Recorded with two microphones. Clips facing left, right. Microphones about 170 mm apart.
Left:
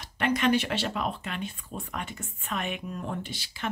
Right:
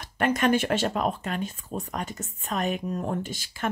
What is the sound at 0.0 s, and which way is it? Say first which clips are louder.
Speech: right 2 dB; 45° right (ahead or behind).